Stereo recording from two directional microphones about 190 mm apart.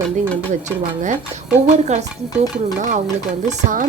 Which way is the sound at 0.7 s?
40° right (ahead or behind).